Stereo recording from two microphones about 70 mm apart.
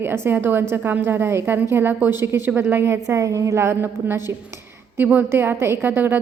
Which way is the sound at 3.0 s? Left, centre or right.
Right.